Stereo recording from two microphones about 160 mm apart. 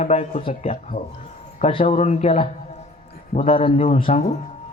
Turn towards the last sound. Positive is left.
turn(degrees=35)  # may be behind; listen again after turning